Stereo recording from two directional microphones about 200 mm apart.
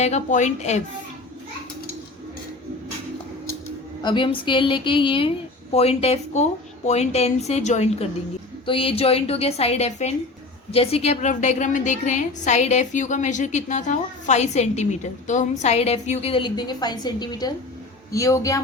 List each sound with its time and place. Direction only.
0.0 s a woman's voice: 35° left (ahead or behind)
4.0 s a woman's voice: 25° left (ahead or behind)